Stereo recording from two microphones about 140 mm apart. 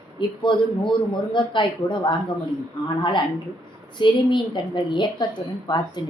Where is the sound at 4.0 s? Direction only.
35° left (ahead or behind).